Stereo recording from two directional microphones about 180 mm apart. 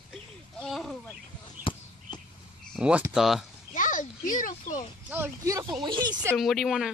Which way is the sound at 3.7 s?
45° left (ahead or behind).